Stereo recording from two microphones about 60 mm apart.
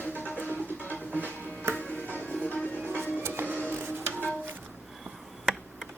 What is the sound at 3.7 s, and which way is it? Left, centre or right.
Music, right.